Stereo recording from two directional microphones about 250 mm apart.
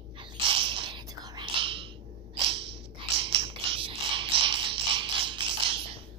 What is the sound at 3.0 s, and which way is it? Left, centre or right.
Mechanisms, right.